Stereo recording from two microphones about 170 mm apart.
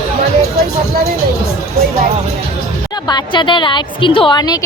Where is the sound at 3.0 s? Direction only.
25° left (ahead or behind).